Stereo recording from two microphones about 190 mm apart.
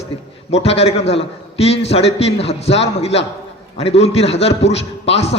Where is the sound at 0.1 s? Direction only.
30° left (ahead or behind).